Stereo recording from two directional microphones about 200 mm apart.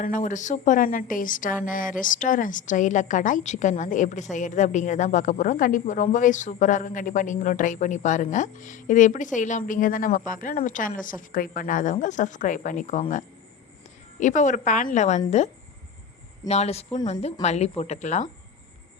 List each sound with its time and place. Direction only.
0.0 s a woman's voice: 40° left (ahead or behind)
16.5 s a woman's voice: 30° left (ahead or behind)